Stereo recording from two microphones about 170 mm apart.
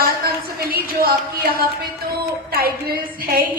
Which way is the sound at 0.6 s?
60° right (ahead or behind).